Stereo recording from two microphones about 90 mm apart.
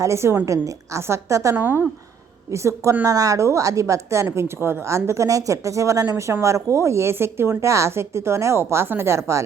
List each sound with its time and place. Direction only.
0.0 s a woman's voice: 30° right (ahead or behind)
1.5 s a woman's voice: 20° right (ahead or behind)
2.5 s a woman's voice: 35° right (ahead or behind)